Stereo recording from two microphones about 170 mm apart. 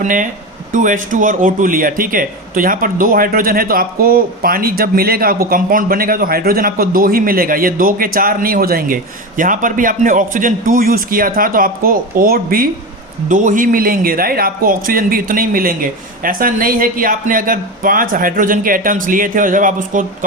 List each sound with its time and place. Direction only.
0.0 s a man's voice: 50° right (ahead or behind)
13.2 s a man's voice: 50° right (ahead or behind)